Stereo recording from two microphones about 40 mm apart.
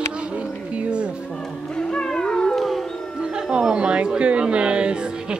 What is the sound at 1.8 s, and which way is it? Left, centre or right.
Cat, centre.